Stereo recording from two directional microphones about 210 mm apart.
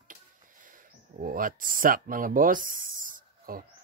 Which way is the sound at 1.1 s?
40° right (ahead or behind).